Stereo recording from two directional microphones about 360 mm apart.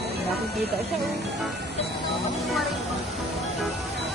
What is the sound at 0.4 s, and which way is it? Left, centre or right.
Speech, right.